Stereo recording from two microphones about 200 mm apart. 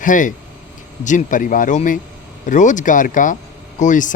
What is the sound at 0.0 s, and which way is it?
Speech, 40° left (ahead or behind).